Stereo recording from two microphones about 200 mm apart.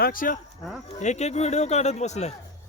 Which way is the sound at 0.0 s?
45° left (ahead or behind).